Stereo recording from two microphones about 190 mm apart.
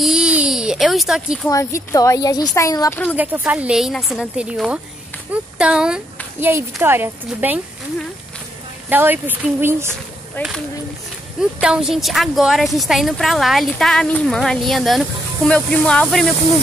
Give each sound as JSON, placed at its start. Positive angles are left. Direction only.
{"t": 0.0, "sound": "a sound", "side_deg": -5}
{"t": 1.5, "sound": "a woman's voice", "side_deg": 15}
{"t": 3.2, "sound": "a woman's voice", "side_deg": -10}
{"t": 8.8, "sound": "speech", "side_deg": -10}
{"t": 10.4, "sound": "a woman's voice", "side_deg": 10}
{"t": 11.6, "sound": "a woman's voice", "side_deg": -5}